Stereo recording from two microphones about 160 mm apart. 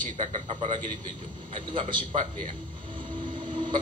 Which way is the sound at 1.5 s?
30° right (ahead or behind).